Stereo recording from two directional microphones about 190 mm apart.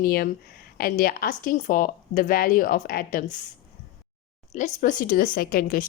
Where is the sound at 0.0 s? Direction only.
50° left (ahead or behind).